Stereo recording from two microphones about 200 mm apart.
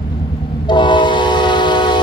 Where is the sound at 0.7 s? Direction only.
25° left (ahead or behind).